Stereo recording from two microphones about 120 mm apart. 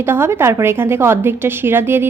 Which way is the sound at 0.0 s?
20° right (ahead or behind).